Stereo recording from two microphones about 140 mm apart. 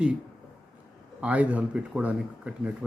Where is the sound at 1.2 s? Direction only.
10° right (ahead or behind).